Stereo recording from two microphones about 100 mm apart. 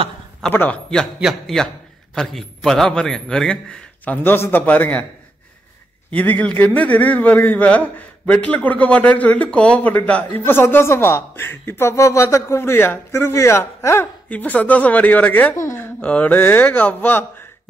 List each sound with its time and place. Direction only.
0.5 s a man's voice: 15° left (ahead or behind)
2.1 s a man's voice: 5° left (ahead or behind)
6.4 s a man's voice: 15° left (ahead or behind)
14.3 s a man's voice: 15° left (ahead or behind)
15.5 s speech: 25° left (ahead or behind)
16.0 s a man's voice: 15° left (ahead or behind)